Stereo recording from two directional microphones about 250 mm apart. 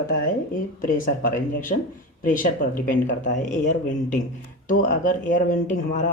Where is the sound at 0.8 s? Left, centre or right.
Left.